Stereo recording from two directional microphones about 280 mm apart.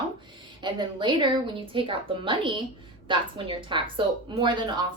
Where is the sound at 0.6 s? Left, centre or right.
Centre.